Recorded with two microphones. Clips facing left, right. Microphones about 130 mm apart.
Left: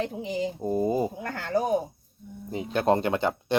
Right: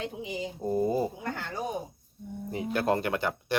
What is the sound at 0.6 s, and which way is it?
Speech, 15° left (ahead or behind).